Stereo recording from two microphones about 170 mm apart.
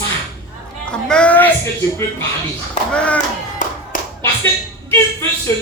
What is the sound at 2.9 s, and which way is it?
Speech, 5° left (ahead or behind).